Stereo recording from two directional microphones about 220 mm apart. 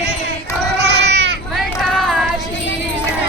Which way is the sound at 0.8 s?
50° right (ahead or behind).